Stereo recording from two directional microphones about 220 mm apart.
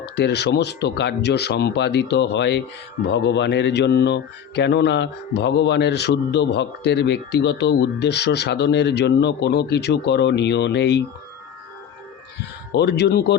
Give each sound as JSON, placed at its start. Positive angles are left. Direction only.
{"t": 0.0, "sound": "speech", "side_deg": 50}
{"t": 12.7, "sound": "speech", "side_deg": 50}